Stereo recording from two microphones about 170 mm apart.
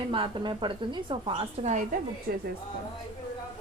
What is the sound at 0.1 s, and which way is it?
A woman's voice, 30° right (ahead or behind).